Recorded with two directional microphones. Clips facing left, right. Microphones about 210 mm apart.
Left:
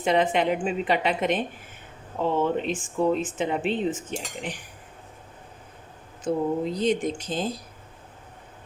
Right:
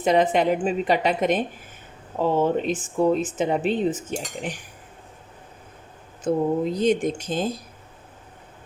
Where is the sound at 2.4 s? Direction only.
40° right (ahead or behind).